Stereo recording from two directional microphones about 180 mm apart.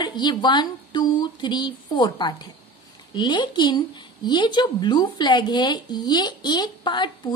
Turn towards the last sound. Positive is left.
turn(degrees=25)  # may be behind; listen again after turning